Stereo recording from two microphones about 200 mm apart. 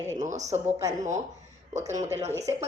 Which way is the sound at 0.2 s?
35° right (ahead or behind).